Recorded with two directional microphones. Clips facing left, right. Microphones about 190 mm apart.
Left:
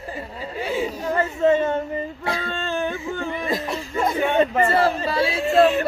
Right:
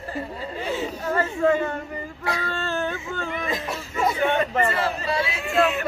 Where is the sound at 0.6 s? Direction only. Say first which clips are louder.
Left 3 dB; 10° left (ahead or behind).